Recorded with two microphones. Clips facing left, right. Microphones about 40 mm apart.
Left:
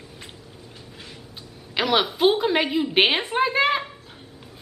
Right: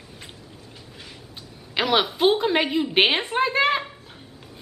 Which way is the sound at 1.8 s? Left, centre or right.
Centre.